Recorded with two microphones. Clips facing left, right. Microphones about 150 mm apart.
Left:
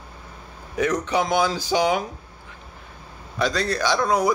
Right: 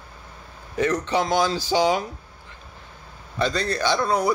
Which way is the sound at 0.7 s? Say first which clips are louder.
Even; 10° left (ahead or behind).